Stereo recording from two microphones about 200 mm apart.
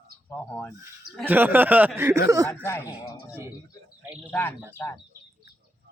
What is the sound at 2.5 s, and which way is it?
Speech, 10° left (ahead or behind).